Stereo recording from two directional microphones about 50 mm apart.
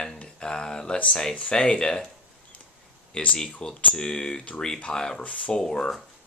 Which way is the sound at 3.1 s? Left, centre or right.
Left.